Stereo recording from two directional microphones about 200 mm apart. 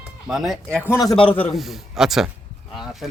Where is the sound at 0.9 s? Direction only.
20° left (ahead or behind).